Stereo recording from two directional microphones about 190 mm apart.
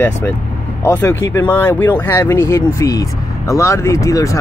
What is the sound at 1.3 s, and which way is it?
Speech, 10° left (ahead or behind).